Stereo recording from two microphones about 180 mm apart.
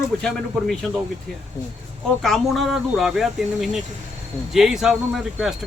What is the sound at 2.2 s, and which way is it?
Speech, centre (ahead or behind).